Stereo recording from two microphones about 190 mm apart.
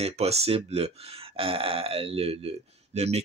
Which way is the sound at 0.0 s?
35° right (ahead or behind).